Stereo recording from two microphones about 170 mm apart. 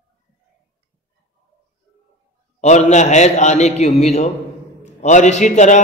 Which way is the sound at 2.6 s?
45° left (ahead or behind).